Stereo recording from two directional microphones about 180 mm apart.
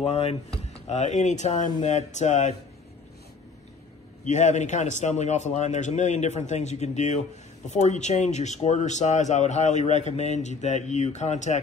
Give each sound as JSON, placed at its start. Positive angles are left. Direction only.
{"t": 0.0, "sound": "speech", "side_deg": 35}
{"t": 4.2, "sound": "speech", "side_deg": 40}